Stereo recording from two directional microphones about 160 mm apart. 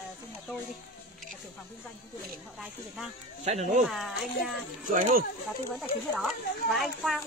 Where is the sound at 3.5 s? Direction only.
45° right (ahead or behind).